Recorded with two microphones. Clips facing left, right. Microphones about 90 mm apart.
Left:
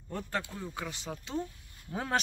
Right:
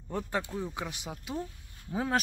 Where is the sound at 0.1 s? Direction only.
15° right (ahead or behind).